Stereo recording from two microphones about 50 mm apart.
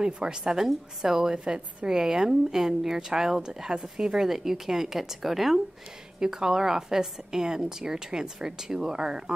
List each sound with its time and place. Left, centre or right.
0.0 s a woman's voice: centre